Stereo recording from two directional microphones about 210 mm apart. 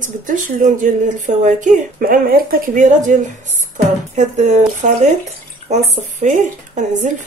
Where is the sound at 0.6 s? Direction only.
35° right (ahead or behind).